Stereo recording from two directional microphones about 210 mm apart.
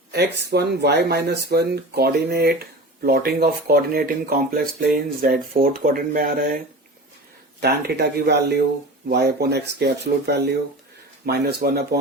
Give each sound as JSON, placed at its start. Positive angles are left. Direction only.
{"t": 0.1, "sound": "speech", "side_deg": -50}
{"t": 7.6, "sound": "speech", "side_deg": -50}